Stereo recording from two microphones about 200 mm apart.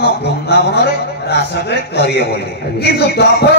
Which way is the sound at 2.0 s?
55° left (ahead or behind).